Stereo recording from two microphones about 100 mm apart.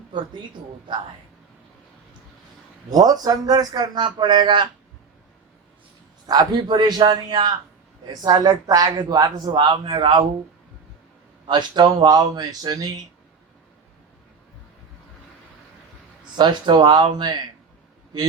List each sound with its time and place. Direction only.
0.1 s speech: 50° right (ahead or behind)
2.9 s speech: 40° right (ahead or behind)
6.2 s speech: 45° right (ahead or behind)
11.4 s speech: 50° right (ahead or behind)
16.4 s speech: 50° right (ahead or behind)